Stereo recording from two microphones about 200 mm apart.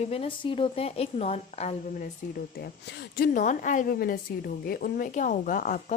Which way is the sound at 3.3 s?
40° left (ahead or behind).